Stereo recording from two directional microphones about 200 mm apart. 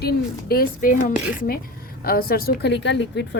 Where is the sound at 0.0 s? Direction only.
50° left (ahead or behind).